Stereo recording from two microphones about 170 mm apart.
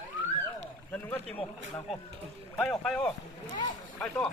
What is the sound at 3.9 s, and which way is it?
Speech, 10° left (ahead or behind).